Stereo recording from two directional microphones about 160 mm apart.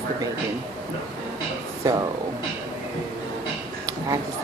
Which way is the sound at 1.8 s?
20° right (ahead or behind).